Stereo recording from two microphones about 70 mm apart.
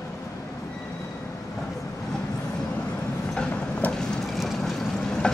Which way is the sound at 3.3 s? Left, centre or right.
Centre.